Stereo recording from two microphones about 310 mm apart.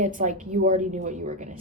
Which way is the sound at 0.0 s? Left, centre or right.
Right.